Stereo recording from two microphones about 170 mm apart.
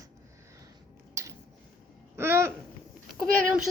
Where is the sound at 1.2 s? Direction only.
15° right (ahead or behind).